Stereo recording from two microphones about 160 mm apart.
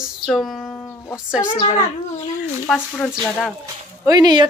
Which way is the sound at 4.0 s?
25° right (ahead or behind).